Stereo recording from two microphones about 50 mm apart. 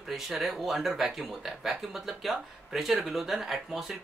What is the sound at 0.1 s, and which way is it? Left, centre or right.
Speech, centre.